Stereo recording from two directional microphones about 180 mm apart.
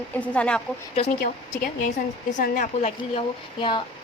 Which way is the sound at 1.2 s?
50° left (ahead or behind).